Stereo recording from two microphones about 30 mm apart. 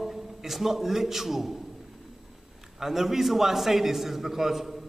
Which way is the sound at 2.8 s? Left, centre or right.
Centre.